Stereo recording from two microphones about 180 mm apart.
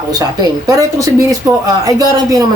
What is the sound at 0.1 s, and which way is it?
A woman's voice, 20° right (ahead or behind).